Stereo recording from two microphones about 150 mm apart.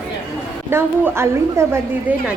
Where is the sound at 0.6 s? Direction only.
15° right (ahead or behind).